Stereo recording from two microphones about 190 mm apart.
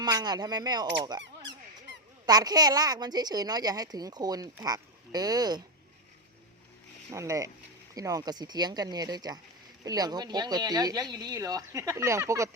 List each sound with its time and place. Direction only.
0.0 s speech: 20° right (ahead or behind)
2.2 s speech: 20° right (ahead or behind)
7.1 s speech: 15° right (ahead or behind)